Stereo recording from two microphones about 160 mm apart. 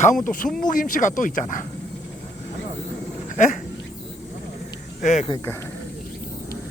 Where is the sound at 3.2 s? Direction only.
50° left (ahead or behind).